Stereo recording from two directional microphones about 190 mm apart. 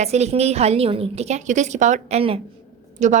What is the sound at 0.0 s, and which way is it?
A woman's voice, 35° right (ahead or behind).